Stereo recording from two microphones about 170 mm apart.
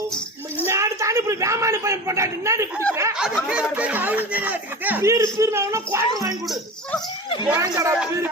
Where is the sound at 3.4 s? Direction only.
5° right (ahead or behind).